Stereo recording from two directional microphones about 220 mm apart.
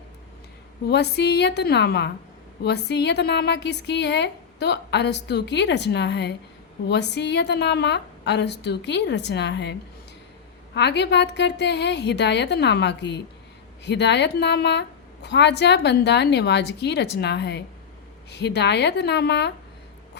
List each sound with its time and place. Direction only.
0.9 s a woman's voice: 50° left (ahead or behind)
10.8 s a woman's voice: 50° left (ahead or behind)